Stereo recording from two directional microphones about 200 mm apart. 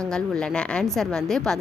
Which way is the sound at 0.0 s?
5° left (ahead or behind).